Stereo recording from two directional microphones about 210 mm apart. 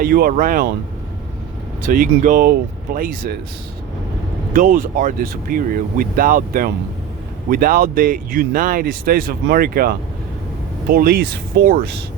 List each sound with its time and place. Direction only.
0.0 s speech: 45° right (ahead or behind)
1.9 s speech: 40° right (ahead or behind)
4.5 s speech: 40° right (ahead or behind)